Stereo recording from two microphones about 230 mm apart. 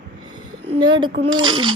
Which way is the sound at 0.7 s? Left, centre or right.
Centre.